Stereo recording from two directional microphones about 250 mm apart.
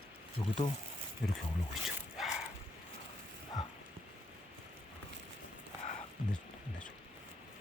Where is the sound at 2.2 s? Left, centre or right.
Centre.